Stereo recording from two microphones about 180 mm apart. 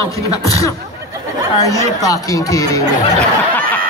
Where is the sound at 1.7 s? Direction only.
20° left (ahead or behind).